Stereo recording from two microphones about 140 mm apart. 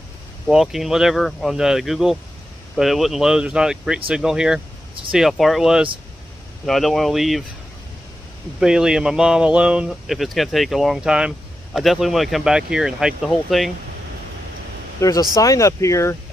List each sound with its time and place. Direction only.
0.5 s speech: 5° right (ahead or behind)
8.5 s speech: 5° right (ahead or behind)
15.0 s speech: 25° left (ahead or behind)